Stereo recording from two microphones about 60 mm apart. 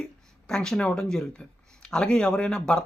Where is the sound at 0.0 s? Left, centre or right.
Centre.